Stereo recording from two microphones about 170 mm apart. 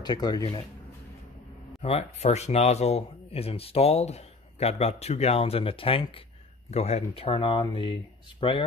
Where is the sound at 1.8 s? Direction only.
40° left (ahead or behind).